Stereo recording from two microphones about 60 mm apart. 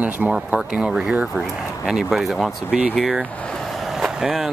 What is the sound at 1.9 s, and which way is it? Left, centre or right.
Speech, centre.